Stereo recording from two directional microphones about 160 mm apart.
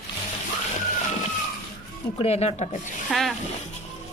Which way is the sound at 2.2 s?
40° left (ahead or behind).